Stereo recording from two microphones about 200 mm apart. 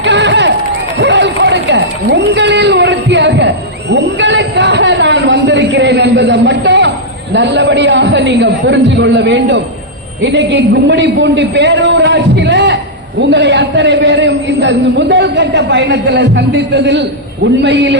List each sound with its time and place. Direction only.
0.0 s run: 60° right (ahead or behind)
2.0 s a sound: 60° right (ahead or behind)
7.3 s a man's voice: 60° right (ahead or behind)